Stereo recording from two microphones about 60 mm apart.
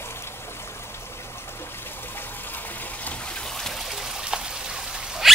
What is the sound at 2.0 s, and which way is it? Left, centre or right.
Water, left.